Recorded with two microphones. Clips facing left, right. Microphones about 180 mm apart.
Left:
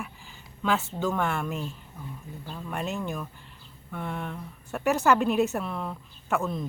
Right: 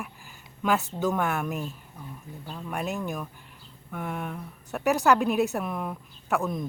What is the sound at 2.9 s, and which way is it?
Speech, 10° right (ahead or behind).